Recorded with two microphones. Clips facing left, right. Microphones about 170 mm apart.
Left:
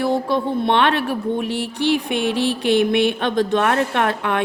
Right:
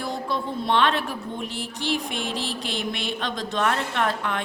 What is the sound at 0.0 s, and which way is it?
Speech, 60° left (ahead or behind).